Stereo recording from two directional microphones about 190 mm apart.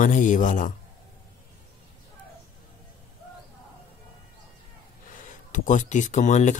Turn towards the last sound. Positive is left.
turn(degrees=40)  # may be behind; listen again after turning